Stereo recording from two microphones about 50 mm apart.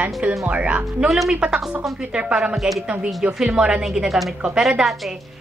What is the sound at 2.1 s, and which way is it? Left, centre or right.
Speech, centre.